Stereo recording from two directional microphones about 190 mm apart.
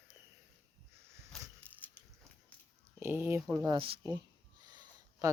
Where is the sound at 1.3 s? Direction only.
Centre (ahead or behind).